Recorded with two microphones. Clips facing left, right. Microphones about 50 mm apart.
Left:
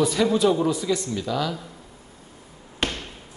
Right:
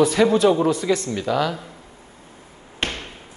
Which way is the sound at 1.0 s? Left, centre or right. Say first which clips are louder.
Right 4 dB; right.